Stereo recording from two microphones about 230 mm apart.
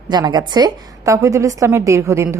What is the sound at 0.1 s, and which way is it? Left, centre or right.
A woman's voice, centre.